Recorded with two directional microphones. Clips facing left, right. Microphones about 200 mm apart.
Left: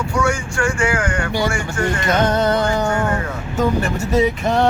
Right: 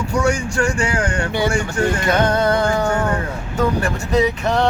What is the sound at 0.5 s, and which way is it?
Speech, 35° right (ahead or behind).